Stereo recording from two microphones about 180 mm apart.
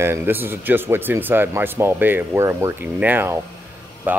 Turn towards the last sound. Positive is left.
turn(degrees=-10)  # may be behind; listen again after turning